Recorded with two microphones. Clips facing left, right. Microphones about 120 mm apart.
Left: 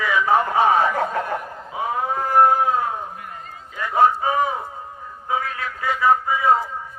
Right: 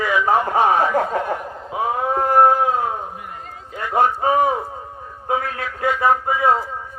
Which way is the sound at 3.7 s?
50° right (ahead or behind).